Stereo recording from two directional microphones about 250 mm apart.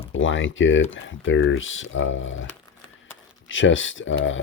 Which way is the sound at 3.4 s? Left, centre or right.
Left.